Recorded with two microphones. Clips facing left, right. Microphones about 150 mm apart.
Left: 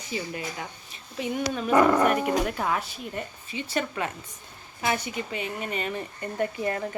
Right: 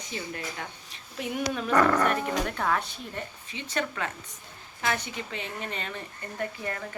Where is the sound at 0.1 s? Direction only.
5° left (ahead or behind).